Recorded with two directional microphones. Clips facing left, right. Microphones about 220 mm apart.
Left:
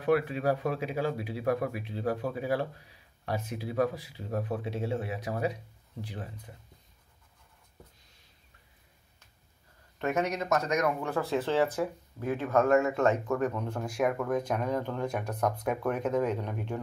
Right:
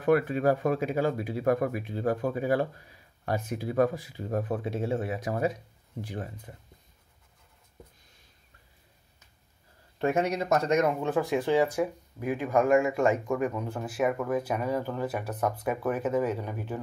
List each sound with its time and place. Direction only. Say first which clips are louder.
0.0 s speech: right 3 dB; 50° right (ahead or behind)
9.9 s speech: right 3 dB; 30° right (ahead or behind); by 16.8 s 5° right (ahead or behind)